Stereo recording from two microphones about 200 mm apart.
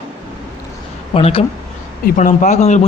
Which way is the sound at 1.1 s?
30° left (ahead or behind).